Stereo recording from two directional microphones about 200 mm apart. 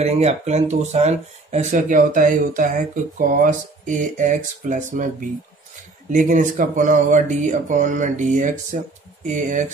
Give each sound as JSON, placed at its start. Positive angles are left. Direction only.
{"t": 0.0, "sound": "speech", "side_deg": -35}